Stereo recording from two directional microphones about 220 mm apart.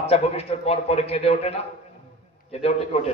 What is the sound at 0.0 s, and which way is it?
A man's voice, 25° left (ahead or behind).